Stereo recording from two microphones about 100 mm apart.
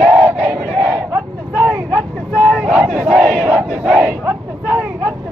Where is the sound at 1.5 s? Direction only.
25° right (ahead or behind).